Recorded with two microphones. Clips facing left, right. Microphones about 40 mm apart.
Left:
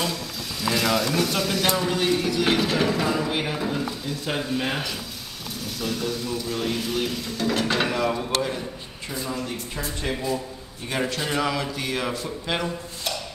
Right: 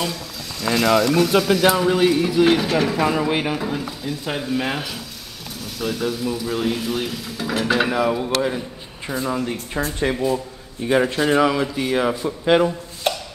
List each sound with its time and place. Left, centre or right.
0.0 s a sound: centre
1.4 s speech: centre
3.0 s speech: centre
9.2 s speech: right
13.0 s chopping: right